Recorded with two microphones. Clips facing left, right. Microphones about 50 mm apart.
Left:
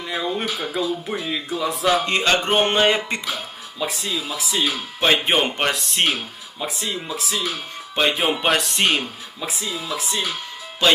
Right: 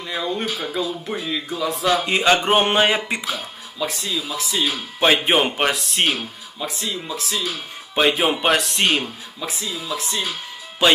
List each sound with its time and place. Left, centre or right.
0.0 s speech: centre
2.0 s music: centre
3.1 s speech: centre
3.8 s speech: centre
4.7 s music: centre
5.1 s speech: centre
6.6 s speech: centre
10.8 s music: centre